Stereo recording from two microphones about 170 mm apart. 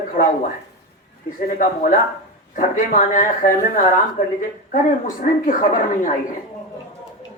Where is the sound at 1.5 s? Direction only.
50° left (ahead or behind).